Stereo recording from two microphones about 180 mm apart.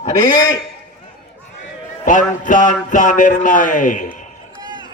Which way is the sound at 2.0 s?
45° left (ahead or behind).